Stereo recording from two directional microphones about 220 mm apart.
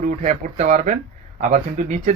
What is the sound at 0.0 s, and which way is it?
Speech, 35° right (ahead or behind).